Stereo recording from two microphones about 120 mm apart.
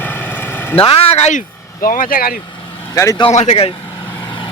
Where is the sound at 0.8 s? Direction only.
55° left (ahead or behind).